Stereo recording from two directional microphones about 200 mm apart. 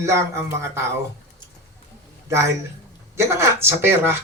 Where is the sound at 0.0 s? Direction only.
15° right (ahead or behind).